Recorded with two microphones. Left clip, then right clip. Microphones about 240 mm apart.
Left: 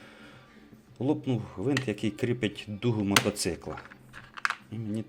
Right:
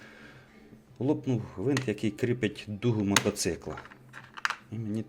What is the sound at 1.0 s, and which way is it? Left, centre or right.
Speech, centre.